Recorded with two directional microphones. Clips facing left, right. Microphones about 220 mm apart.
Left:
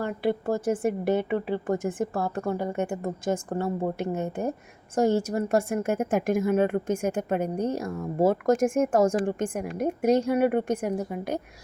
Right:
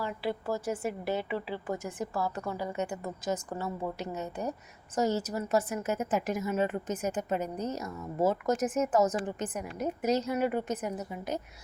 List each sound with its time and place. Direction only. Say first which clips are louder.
0.0 s a woman's voice: left 7 dB; 55° left (ahead or behind)